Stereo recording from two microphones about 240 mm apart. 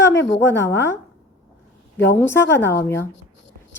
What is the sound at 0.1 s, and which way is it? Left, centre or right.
Speech, left.